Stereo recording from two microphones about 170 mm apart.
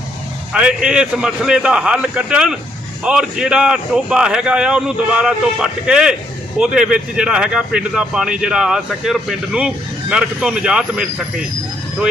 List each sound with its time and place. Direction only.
0.5 s speech: 5° right (ahead or behind)